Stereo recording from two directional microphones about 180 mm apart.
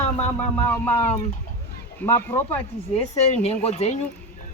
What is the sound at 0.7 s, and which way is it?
Speech, 10° left (ahead or behind).